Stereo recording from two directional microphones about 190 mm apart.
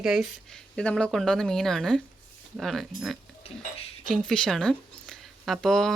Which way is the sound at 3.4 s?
30° left (ahead or behind).